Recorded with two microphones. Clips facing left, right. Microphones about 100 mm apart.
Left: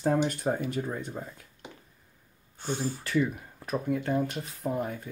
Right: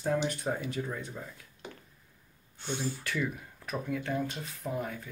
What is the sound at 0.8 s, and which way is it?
Speech, 25° left (ahead or behind).